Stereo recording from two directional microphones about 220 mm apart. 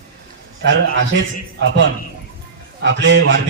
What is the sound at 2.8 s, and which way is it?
Speech, 55° right (ahead or behind).